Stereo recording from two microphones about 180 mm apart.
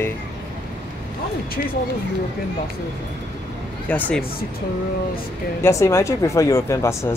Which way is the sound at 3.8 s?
10° left (ahead or behind).